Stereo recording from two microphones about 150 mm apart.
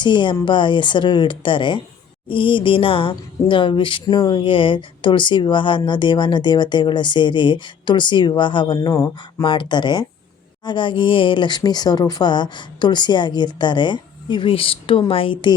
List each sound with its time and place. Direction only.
0.0 s a woman's voice: 30° left (ahead or behind)